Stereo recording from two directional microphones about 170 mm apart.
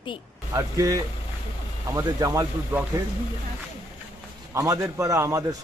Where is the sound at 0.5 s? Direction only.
20° right (ahead or behind).